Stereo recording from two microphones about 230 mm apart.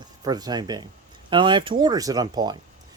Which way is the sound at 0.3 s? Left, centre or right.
Centre.